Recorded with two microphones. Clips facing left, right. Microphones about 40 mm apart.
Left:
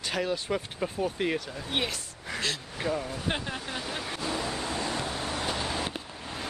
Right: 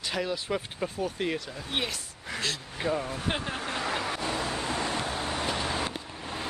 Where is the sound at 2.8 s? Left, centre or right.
Centre.